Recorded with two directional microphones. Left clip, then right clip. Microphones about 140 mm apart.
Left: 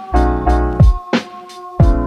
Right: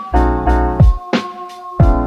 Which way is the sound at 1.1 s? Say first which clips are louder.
Even; centre (ahead or behind).